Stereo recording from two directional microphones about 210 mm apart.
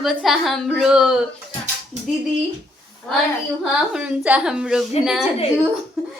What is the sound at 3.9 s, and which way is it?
A woman's voice, 5° right (ahead or behind).